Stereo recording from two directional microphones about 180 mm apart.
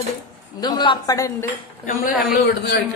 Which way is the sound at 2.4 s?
70° left (ahead or behind).